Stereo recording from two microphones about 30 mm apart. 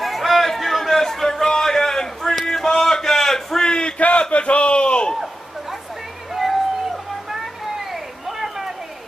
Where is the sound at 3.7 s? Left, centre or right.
Left.